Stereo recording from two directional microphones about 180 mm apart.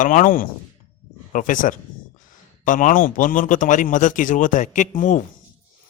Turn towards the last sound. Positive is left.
turn(degrees=45)  # may be behind; listen again after turning